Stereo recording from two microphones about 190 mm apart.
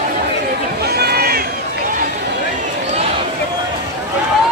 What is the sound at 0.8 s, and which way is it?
Run, 55° right (ahead or behind).